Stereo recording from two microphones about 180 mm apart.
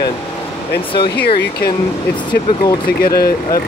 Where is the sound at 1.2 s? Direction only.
60° left (ahead or behind).